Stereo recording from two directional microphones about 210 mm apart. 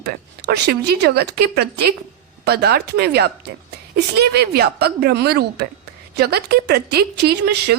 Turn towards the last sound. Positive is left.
turn(degrees=-50)  # may be behind; listen again after turning